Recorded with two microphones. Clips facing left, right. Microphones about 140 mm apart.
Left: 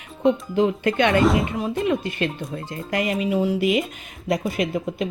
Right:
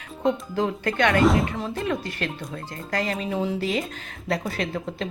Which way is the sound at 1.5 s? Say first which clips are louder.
Left 5 dB; 20° left (ahead or behind).